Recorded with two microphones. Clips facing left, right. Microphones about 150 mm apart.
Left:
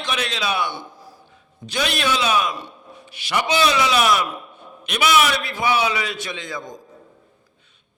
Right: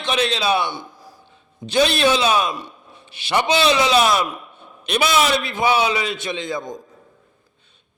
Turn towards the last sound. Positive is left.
turn(degrees=-20)  # may be behind; listen again after turning